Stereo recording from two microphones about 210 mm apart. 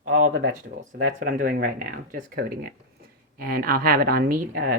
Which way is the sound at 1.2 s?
40° right (ahead or behind).